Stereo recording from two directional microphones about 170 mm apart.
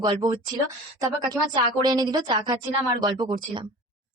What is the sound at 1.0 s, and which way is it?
A woman's voice, 20° right (ahead or behind).